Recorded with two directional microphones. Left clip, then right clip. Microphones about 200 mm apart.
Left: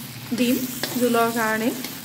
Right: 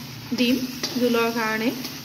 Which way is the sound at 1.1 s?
25° left (ahead or behind).